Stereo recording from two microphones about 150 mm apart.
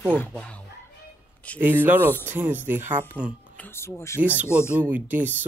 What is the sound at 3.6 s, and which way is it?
Speech, 15° left (ahead or behind).